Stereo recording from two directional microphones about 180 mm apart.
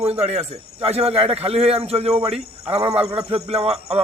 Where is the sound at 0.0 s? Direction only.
35° right (ahead or behind).